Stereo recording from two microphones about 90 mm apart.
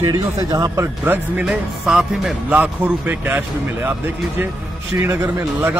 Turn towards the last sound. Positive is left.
turn(degrees=-25)  # may be behind; listen again after turning